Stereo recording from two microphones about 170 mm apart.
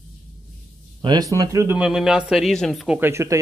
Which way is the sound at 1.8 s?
5° right (ahead or behind).